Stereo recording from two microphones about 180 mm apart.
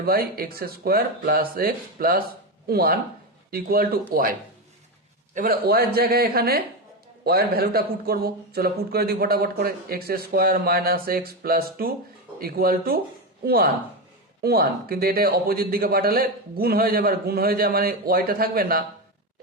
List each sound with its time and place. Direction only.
0.0 s a man's voice: 55° right (ahead or behind)